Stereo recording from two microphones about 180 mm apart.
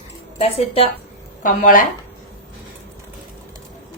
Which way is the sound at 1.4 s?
50° left (ahead or behind).